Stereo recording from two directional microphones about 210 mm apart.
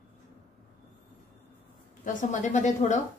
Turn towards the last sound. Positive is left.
turn(degrees=35)  # may be behind; listen again after turning